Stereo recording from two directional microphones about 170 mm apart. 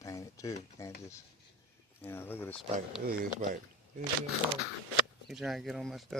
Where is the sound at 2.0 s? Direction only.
15° left (ahead or behind).